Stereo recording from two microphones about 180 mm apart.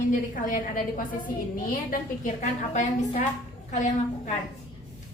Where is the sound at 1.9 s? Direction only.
45° left (ahead or behind).